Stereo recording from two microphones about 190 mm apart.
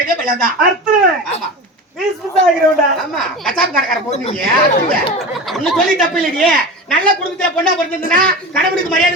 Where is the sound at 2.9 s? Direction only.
Centre (ahead or behind).